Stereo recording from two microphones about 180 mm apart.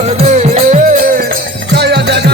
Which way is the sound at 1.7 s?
70° right (ahead or behind).